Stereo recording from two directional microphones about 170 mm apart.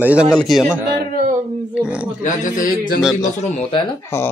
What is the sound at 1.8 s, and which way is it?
Speech, 5° right (ahead or behind).